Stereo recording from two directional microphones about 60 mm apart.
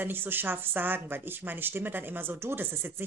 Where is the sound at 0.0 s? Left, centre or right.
Right.